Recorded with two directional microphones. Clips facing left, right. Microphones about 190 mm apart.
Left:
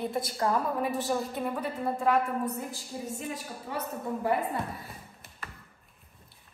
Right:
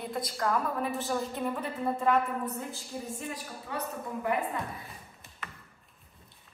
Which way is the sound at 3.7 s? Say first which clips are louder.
Left 2 dB; 30° left (ahead or behind).